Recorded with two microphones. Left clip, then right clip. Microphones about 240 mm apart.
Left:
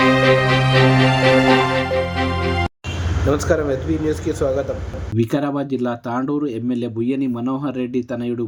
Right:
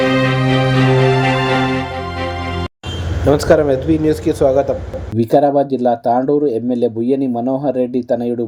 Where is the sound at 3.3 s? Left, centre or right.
Centre.